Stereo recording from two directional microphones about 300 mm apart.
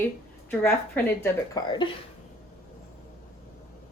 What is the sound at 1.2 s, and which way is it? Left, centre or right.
Speech, centre.